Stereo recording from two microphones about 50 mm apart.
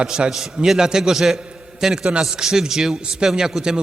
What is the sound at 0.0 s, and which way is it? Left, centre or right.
Speech, centre.